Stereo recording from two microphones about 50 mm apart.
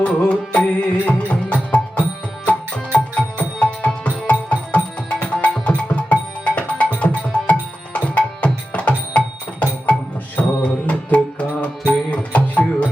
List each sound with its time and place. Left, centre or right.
0.0 s music: left